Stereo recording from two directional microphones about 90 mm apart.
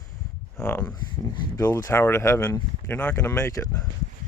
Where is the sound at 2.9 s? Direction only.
20° left (ahead or behind).